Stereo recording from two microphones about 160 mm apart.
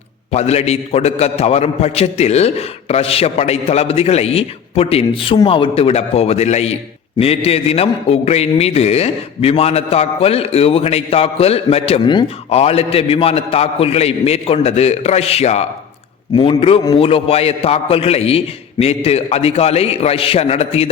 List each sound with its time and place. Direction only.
0.3 s a man's voice: 40° left (ahead or behind)